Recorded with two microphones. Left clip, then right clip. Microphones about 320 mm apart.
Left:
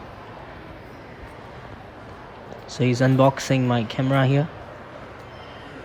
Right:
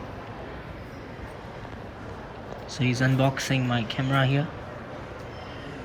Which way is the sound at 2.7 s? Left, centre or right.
Left.